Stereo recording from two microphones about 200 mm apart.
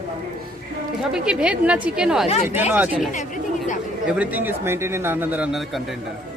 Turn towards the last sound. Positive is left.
turn(degrees=-5)  # may be behind; listen again after turning